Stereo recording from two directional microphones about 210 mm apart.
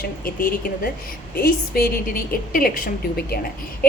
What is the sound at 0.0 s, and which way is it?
A woman's voice, 45° left (ahead or behind).